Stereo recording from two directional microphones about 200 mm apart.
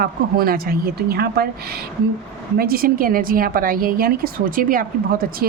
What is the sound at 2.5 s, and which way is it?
A woman's voice, 50° right (ahead or behind).